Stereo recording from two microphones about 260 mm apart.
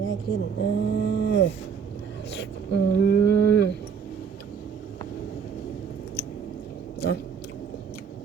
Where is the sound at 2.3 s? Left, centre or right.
Left.